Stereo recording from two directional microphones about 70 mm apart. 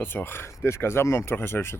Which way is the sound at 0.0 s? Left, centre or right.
Left.